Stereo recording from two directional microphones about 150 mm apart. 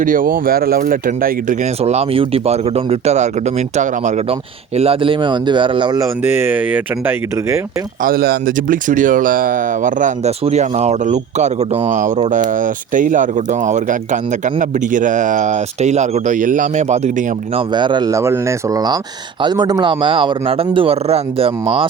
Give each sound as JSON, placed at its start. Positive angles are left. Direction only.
{"t": 0.0, "sound": "speech", "side_deg": -65}
{"t": 1.8, "sound": "speech", "side_deg": -45}
{"t": 4.8, "sound": "a man's voice", "side_deg": -40}
{"t": 6.2, "sound": "speech", "side_deg": -15}
{"t": 8.0, "sound": "speech", "side_deg": -85}
{"t": 10.4, "sound": "speech", "side_deg": -50}
{"t": 17.7, "sound": "a man's voice", "side_deg": -30}